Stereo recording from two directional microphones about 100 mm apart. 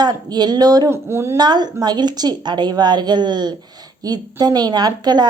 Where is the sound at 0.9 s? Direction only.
25° right (ahead or behind).